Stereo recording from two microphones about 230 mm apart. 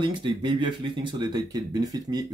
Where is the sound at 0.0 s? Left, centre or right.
Centre.